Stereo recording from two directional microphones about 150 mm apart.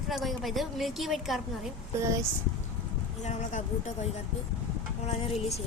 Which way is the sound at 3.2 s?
50° left (ahead or behind).